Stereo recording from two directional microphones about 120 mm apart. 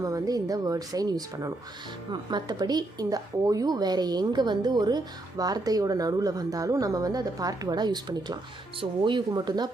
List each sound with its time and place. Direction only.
0.0 s a woman's voice: 30° right (ahead or behind)